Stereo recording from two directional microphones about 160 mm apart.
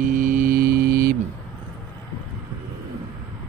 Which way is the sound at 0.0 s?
55° right (ahead or behind).